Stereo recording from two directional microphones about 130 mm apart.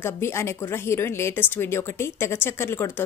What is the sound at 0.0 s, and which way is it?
A woman's voice, 20° left (ahead or behind).